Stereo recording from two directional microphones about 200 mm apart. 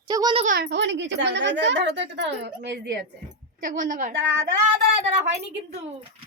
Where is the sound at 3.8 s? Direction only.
40° right (ahead or behind).